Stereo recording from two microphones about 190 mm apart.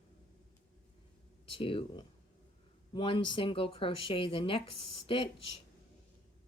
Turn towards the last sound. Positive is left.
turn(degrees=30)  # may be behind; listen again after turning